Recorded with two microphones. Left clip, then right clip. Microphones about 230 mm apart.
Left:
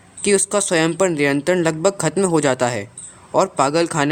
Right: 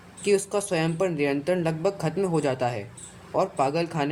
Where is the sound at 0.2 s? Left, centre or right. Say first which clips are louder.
Left 6 dB; left.